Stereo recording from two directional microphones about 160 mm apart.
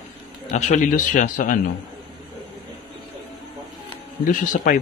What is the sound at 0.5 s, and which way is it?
Speech, 50° left (ahead or behind).